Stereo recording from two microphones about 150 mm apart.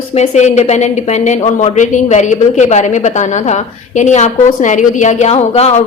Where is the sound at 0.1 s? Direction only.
50° left (ahead or behind).